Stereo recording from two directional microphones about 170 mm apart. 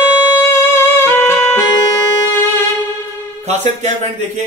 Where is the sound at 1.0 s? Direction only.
15° left (ahead or behind).